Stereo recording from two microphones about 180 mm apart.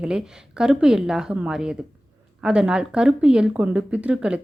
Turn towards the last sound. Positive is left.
turn(degrees=-5)  # may be behind; listen again after turning